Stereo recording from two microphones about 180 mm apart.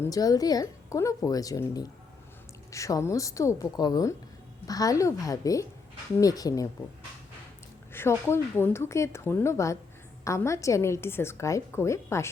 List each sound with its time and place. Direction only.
0.0 s a woman's voice: 20° left (ahead or behind)
7.9 s a woman's voice: 15° left (ahead or behind)